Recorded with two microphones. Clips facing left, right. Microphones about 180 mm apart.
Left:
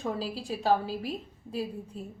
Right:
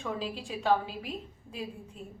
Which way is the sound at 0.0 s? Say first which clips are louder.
Left 2 dB; 35° left (ahead or behind).